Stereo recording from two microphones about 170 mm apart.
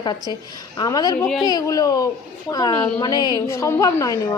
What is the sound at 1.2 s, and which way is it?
Speech, 5° left (ahead or behind).